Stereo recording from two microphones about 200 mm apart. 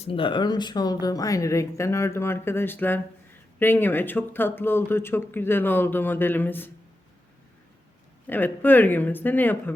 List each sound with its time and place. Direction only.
0.0 s speech: 25° left (ahead or behind); by 6.7 s 10° left (ahead or behind)
8.3 s speech: 10° left (ahead or behind)